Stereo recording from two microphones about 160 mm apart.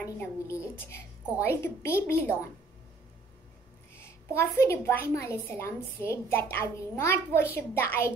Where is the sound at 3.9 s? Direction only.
15° left (ahead or behind).